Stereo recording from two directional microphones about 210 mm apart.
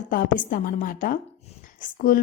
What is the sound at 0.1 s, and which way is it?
A woman's voice, 40° left (ahead or behind).